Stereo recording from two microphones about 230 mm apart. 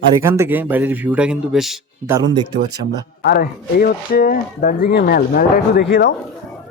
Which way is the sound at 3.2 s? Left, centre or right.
Left.